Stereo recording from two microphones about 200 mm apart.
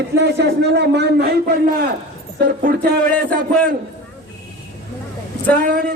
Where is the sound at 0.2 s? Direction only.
60° right (ahead or behind).